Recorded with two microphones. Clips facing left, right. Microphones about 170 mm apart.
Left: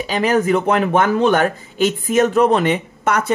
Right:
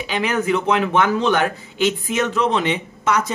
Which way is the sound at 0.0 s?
40° left (ahead or behind).